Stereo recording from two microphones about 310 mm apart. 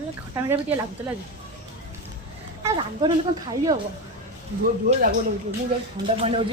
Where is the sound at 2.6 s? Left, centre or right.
Centre.